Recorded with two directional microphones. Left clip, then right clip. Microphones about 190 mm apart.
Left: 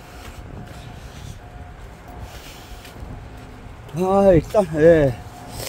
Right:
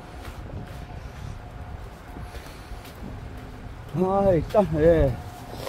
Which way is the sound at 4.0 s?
55° left (ahead or behind).